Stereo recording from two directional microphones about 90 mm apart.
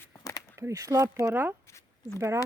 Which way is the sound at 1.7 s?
30° left (ahead or behind).